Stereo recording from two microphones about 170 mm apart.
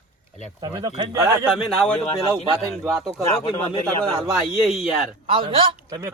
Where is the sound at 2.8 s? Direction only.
15° right (ahead or behind).